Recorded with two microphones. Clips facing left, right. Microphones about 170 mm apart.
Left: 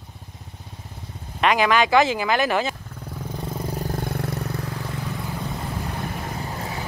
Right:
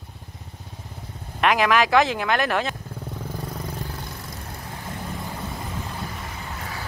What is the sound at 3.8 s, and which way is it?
Vehicle, 50° left (ahead or behind).